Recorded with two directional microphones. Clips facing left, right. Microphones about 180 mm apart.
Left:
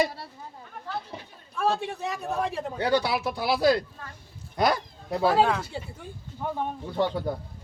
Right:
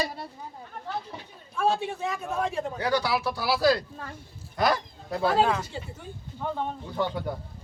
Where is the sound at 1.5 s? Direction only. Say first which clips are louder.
Right 1 dB; centre (ahead or behind).